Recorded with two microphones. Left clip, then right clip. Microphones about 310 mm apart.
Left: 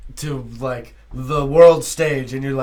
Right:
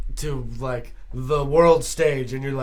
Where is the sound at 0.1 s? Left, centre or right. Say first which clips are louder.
Left 2 dB; right.